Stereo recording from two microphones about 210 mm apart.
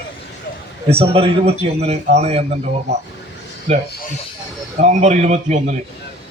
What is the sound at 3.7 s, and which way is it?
A man's voice, 30° right (ahead or behind).